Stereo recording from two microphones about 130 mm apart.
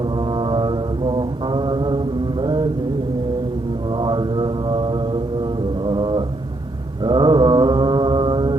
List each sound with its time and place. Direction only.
0.2 s mantra: 40° right (ahead or behind)
3.9 s mantra: 35° right (ahead or behind)